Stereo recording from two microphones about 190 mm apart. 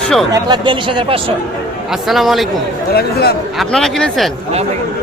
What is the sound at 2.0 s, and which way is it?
Speech, centre (ahead or behind).